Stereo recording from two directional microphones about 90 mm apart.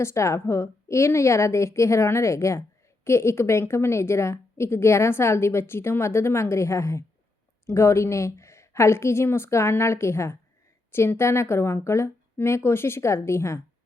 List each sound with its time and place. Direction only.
0.0 s a woman's voice: 30° left (ahead or behind)